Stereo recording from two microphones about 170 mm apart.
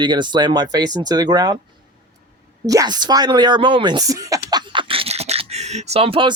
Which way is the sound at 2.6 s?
20° right (ahead or behind).